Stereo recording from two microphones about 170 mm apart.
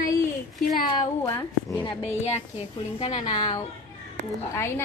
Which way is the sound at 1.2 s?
15° left (ahead or behind).